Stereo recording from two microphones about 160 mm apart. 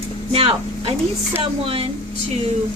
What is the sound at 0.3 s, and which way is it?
Speech, 35° right (ahead or behind).